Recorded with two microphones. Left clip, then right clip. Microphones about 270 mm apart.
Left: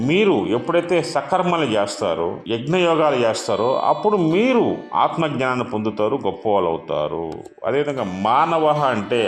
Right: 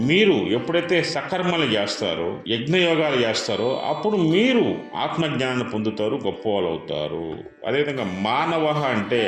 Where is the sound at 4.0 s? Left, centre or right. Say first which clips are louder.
Left 2 dB; centre.